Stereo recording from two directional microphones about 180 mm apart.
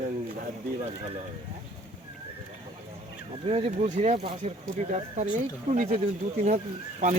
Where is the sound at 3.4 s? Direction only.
35° right (ahead or behind).